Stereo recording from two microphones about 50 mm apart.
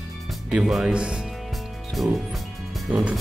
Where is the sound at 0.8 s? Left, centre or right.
Right.